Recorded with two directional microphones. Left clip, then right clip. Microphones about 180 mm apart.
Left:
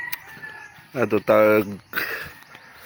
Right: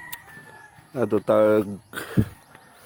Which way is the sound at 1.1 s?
10° right (ahead or behind).